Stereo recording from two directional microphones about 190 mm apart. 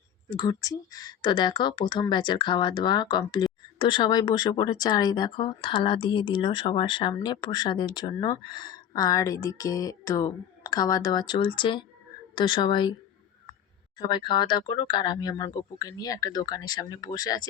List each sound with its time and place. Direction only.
0.3 s speech: 20° left (ahead or behind)
14.1 s speech: 25° left (ahead or behind)